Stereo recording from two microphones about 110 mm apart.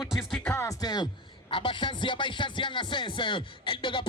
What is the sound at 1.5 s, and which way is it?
Speech, 50° left (ahead or behind).